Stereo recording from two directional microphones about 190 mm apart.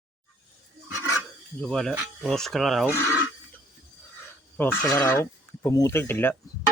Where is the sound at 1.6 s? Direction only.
Centre (ahead or behind).